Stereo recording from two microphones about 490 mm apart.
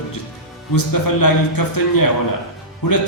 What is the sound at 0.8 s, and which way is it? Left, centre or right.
A man's voice, left.